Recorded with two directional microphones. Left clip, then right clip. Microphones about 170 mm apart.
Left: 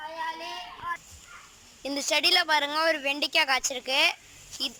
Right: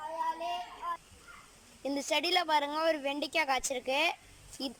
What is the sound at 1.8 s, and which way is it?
Speech, 15° right (ahead or behind).